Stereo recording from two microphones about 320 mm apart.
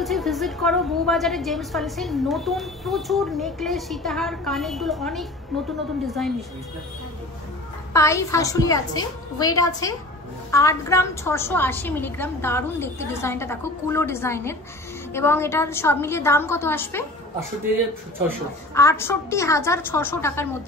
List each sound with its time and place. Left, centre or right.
0.0 s a woman's voice: centre
7.9 s a woman's voice: centre
18.8 s a woman's voice: centre